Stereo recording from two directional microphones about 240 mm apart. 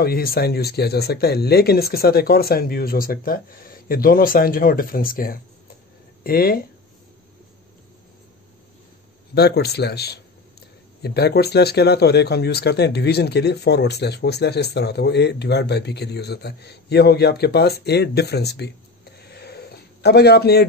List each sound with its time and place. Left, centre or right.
0.0 s speech: left
9.3 s speech: left
19.1 s a sound: left